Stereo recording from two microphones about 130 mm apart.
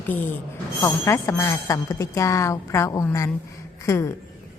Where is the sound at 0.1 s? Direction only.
15° left (ahead or behind).